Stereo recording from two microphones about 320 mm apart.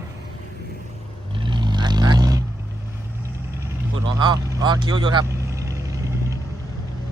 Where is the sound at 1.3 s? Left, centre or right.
Centre.